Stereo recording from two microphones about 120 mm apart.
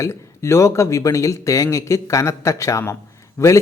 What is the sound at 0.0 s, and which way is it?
Speech, 25° left (ahead or behind).